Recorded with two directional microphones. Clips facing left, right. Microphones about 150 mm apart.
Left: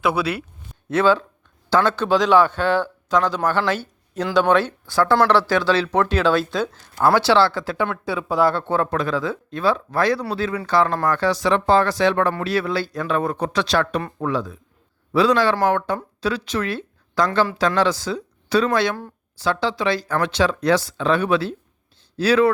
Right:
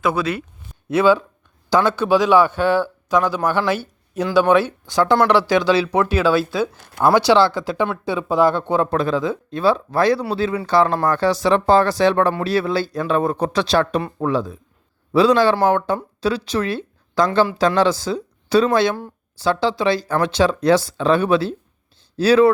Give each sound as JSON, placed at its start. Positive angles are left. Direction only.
{"t": 0.0, "sound": "speech", "side_deg": 10}
{"t": 0.9, "sound": "a man's voice", "side_deg": -10}
{"t": 8.9, "sound": "speech", "side_deg": -30}
{"t": 9.5, "sound": "speech", "side_deg": -30}